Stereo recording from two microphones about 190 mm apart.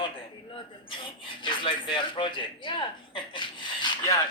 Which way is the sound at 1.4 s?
25° left (ahead or behind).